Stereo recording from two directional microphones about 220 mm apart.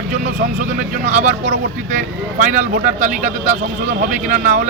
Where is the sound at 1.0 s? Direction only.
30° right (ahead or behind).